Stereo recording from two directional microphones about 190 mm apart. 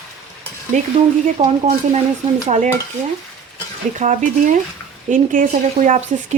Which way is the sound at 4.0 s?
40° right (ahead or behind).